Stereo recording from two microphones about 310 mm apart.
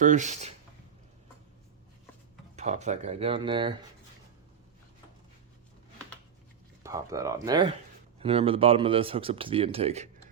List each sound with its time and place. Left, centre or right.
0.0 s speech: right
2.6 s speech: right
6.8 s speech: centre